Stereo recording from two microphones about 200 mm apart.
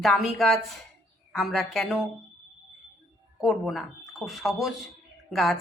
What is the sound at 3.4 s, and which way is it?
Speech, centre (ahead or behind).